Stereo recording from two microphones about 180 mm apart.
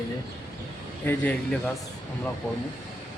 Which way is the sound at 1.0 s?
5° left (ahead or behind).